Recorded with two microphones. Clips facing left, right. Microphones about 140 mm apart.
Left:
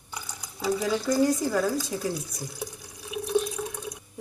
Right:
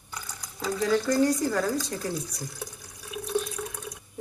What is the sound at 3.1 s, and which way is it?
Water, 5° left (ahead or behind).